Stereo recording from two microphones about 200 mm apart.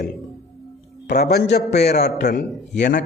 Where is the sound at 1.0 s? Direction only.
55° left (ahead or behind).